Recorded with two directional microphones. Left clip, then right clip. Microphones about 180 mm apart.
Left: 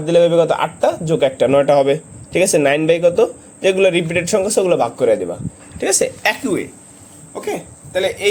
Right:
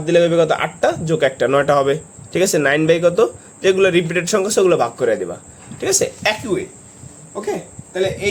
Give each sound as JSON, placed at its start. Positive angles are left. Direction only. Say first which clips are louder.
{"t": 0.0, "sound": "a man's voice", "louder": "left 2 dB", "side_deg": 0}
{"t": 6.2, "sound": "speech", "louder": "left 1 dB", "side_deg": 30}
{"t": 7.4, "sound": "speech", "louder": "left 1 dB", "side_deg": 45}